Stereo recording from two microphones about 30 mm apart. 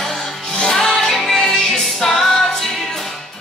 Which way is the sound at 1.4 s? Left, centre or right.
Left.